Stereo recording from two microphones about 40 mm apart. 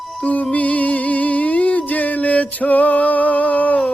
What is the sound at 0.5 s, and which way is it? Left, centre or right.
Music, left.